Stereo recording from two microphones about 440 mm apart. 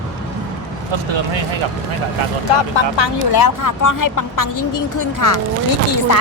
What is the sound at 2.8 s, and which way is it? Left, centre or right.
Speech, left.